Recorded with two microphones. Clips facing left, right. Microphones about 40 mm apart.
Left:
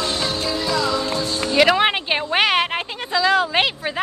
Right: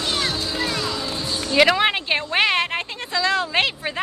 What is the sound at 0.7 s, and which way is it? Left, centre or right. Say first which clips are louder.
Music: left 5 dB; left.